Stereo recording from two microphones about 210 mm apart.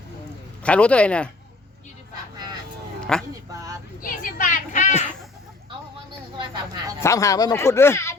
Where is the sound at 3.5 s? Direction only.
15° right (ahead or behind).